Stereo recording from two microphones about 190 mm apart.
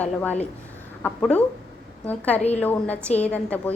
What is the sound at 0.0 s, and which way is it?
A woman's voice, 10° left (ahead or behind).